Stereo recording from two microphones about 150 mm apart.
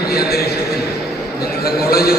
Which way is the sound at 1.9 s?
90° left.